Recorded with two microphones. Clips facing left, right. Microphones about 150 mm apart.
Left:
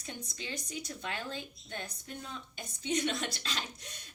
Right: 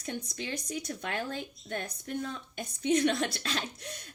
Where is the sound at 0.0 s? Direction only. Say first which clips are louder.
Right 6 dB; 60° right (ahead or behind).